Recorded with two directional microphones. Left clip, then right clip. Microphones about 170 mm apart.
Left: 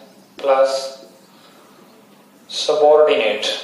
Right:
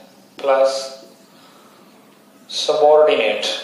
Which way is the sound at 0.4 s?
15° right (ahead or behind).